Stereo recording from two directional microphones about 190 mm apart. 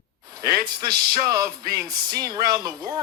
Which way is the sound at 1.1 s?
20° right (ahead or behind).